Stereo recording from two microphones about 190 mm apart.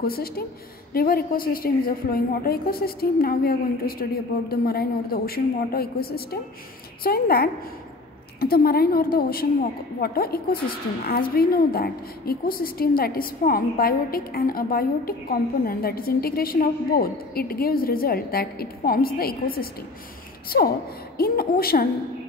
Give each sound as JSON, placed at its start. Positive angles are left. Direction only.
{"t": 0.0, "sound": "a woman's voice", "side_deg": 50}